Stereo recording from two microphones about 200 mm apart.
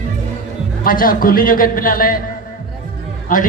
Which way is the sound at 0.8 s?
45° left (ahead or behind).